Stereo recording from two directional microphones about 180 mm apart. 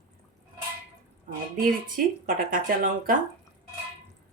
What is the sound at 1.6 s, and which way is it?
Speech, 50° right (ahead or behind).